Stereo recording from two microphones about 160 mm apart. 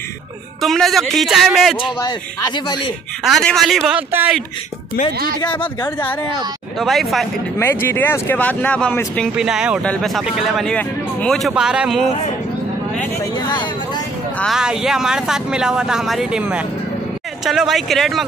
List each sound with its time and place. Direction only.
0.6 s speech: centre (ahead or behind)
2.0 s speech: 25° left (ahead or behind)
3.3 s speech: centre (ahead or behind)
5.5 s speech: 10° left (ahead or behind)
7.5 s speech: 15° left (ahead or behind)
9.4 s speech: 5° right (ahead or behind)
14.4 s speech: 5° right (ahead or behind)